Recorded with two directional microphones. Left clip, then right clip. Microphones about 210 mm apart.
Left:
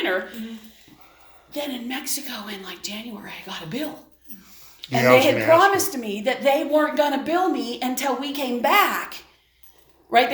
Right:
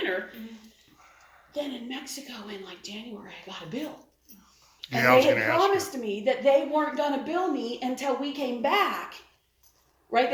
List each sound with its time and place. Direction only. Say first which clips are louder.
1.5 s a woman's voice: left 5 dB; 50° left (ahead or behind)
4.8 s speech: left 4 dB; 10° left (ahead or behind)
5.7 s a woman's voice: left 4 dB; 55° left (ahead or behind)